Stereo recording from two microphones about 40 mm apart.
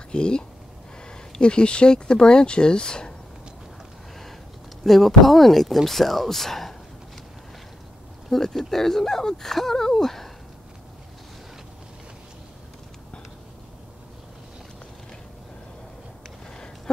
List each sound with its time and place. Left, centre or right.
0.1 s speech: left
4.8 s speech: centre
8.3 s speech: centre
16.4 s a sound: centre